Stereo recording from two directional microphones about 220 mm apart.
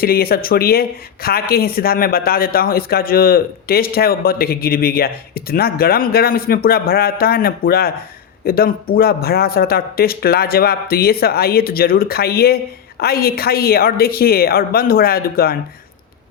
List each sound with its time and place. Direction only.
0.0 s speech: 45° left (ahead or behind)